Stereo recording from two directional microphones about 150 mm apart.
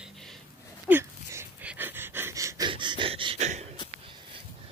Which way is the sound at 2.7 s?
30° right (ahead or behind).